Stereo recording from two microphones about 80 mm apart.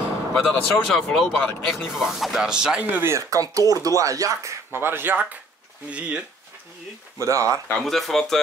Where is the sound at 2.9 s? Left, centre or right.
Right.